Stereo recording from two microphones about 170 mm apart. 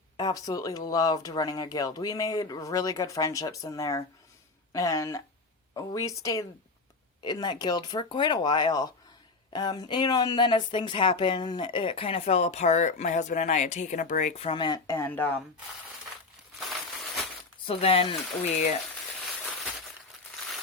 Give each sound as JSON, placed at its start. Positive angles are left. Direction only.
{"t": 0.2, "sound": "speech", "side_deg": 20}
{"t": 16.6, "sound": "a sound", "side_deg": 0}
{"t": 17.7, "sound": "speech", "side_deg": 35}